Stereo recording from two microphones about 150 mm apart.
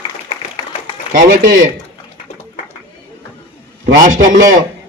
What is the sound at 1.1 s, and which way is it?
Speech, 60° right (ahead or behind).